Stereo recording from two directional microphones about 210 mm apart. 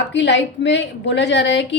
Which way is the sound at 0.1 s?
60° left (ahead or behind).